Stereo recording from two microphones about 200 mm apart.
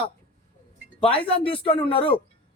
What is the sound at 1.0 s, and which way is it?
A woman's voice, 30° left (ahead or behind).